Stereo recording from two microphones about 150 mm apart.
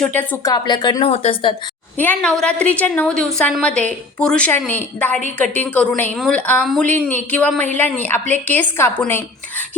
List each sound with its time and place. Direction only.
0.0 s a woman's voice: 10° left (ahead or behind)
0.4 s speech: 30° left (ahead or behind)
1.1 s a woman's voice: 40° left (ahead or behind)
2.0 s a woman's voice: 10° left (ahead or behind)